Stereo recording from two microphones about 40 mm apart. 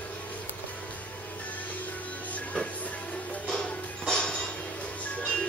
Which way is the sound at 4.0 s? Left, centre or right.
Centre.